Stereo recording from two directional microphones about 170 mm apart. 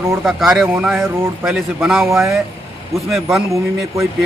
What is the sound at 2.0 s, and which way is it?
Speech, 15° right (ahead or behind).